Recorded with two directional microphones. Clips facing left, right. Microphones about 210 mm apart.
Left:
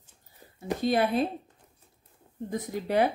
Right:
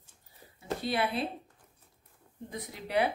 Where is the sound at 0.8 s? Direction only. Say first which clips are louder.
Left 7 dB; 45° left (ahead or behind).